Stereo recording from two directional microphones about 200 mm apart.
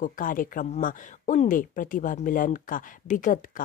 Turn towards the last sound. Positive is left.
turn(degrees=40)  # may be behind; listen again after turning